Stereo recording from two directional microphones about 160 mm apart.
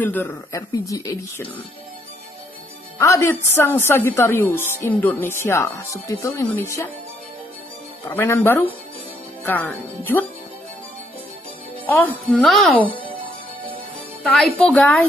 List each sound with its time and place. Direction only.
0.0 s a woman's voice: 10° left (ahead or behind)
3.0 s a woman's voice: 20° left (ahead or behind)
8.1 s a woman's voice: 15° left (ahead or behind)
11.8 s a woman's voice: 10° left (ahead or behind)
14.2 s speech: 5° left (ahead or behind)